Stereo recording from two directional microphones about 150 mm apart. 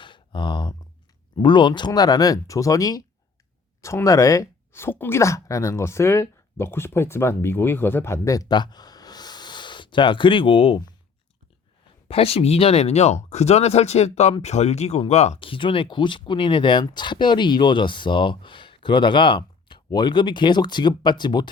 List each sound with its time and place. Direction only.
0.0 s a sound: 30° left (ahead or behind)
1.4 s speech: 30° left (ahead or behind)
12.0 s speech: 40° left (ahead or behind)